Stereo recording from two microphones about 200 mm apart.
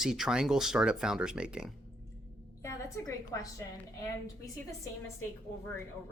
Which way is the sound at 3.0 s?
15° left (ahead or behind).